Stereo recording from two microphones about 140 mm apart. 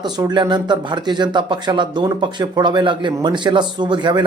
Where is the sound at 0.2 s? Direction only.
30° right (ahead or behind).